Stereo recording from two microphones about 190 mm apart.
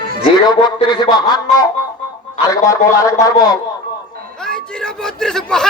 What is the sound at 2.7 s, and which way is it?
Speech, 15° left (ahead or behind).